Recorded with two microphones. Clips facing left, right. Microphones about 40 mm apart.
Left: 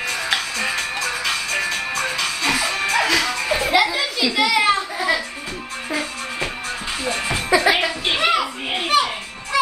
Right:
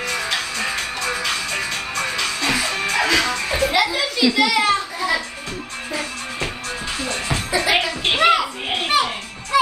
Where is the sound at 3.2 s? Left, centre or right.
Centre.